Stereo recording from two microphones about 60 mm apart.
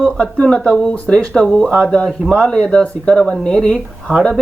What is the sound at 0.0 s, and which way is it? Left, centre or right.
Speech, left.